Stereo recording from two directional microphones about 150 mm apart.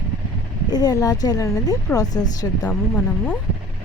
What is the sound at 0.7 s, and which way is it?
Speech, 25° left (ahead or behind).